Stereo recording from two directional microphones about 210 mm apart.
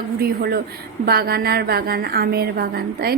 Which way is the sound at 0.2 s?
45° right (ahead or behind).